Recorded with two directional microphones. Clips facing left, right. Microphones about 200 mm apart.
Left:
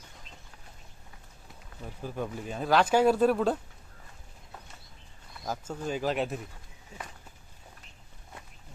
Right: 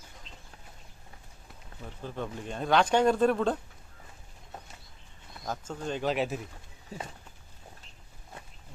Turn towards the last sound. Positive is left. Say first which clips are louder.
# right 4 dB
turn(degrees=-35)  # may be behind; listen again after turning